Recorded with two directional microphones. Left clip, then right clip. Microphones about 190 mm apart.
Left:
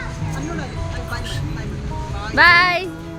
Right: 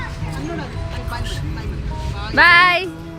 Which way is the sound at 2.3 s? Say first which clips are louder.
Right 1 dB; 10° right (ahead or behind).